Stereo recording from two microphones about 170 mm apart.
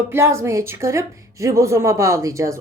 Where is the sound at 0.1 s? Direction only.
15° right (ahead or behind).